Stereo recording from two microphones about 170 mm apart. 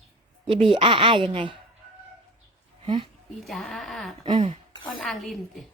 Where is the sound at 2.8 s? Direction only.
30° right (ahead or behind).